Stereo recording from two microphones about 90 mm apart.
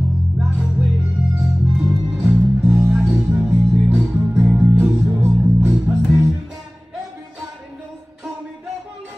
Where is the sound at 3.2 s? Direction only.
15° right (ahead or behind).